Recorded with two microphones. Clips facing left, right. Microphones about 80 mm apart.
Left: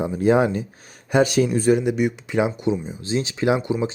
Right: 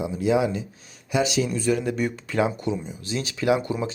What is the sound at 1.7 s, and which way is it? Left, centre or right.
Speech, centre.